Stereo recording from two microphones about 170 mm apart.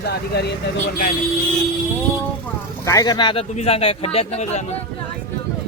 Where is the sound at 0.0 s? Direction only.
75° left (ahead or behind).